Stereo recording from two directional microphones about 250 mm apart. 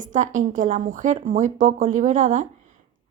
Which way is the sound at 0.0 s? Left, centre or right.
Right.